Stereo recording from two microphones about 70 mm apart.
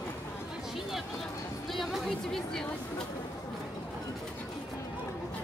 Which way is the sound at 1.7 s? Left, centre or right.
Centre.